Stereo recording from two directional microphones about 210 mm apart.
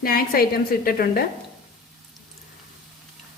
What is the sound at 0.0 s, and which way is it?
A woman's voice, 45° left (ahead or behind).